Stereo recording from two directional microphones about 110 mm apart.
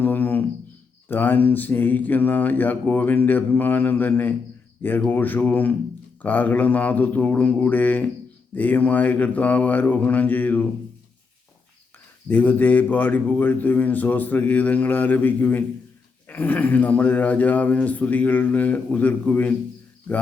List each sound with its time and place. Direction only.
0.0 s a sound: 20° left (ahead or behind)
1.0 s speech: 15° left (ahead or behind)
12.3 s speech: 15° left (ahead or behind)